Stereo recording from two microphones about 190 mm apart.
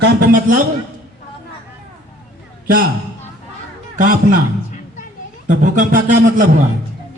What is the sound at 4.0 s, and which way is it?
Speech, 45° right (ahead or behind).